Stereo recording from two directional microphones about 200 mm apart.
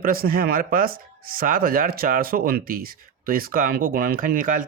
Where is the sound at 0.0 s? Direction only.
45° right (ahead or behind).